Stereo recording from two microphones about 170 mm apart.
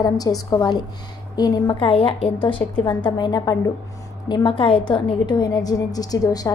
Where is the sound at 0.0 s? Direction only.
20° left (ahead or behind).